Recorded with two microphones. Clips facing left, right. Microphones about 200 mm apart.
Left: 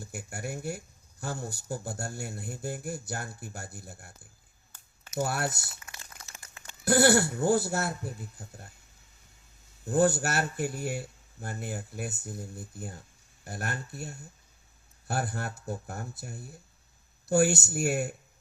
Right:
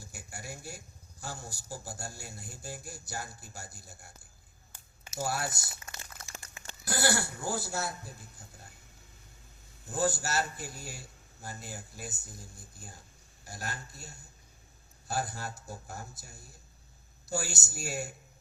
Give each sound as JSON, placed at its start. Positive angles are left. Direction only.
{"t": 0.0, "sound": "speech", "side_deg": 60}
{"t": 6.8, "sound": "speech", "side_deg": 65}
{"t": 9.8, "sound": "speech", "side_deg": 60}